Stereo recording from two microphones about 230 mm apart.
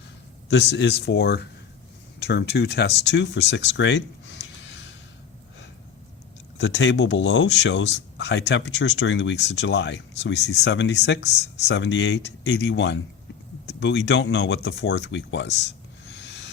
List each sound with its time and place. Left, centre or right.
0.5 s speech: left
6.6 s speech: left